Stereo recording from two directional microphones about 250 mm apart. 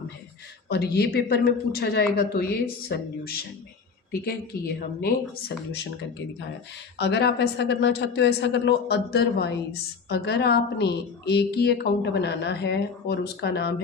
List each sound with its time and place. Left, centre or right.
0.7 s a woman's voice: left
7.0 s a woman's voice: left